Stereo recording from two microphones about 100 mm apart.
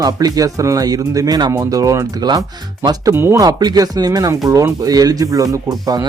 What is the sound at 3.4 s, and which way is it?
Speech, 45° right (ahead or behind).